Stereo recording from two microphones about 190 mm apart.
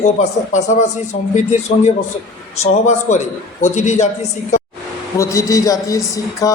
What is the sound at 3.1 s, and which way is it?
A man's voice, 40° left (ahead or behind).